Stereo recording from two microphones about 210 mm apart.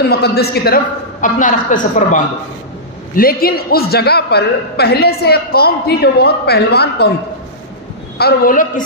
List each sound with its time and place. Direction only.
0.1 s a woman's voice: 50° left (ahead or behind)
8.2 s a woman's voice: 45° left (ahead or behind)